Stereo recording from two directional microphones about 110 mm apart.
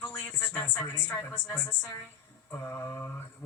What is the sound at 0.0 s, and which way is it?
A woman's voice, 15° left (ahead or behind).